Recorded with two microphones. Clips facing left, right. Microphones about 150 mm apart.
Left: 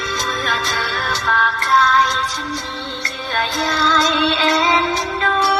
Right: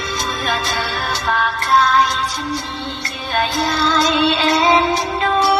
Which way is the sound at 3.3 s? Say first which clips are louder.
Right 2 dB; 10° right (ahead or behind).